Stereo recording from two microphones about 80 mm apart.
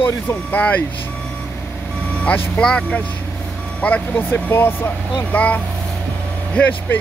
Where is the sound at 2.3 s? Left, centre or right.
Centre.